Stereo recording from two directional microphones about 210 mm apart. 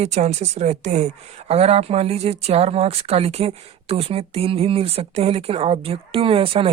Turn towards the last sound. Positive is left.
turn(degrees=-25)  # may be behind; listen again after turning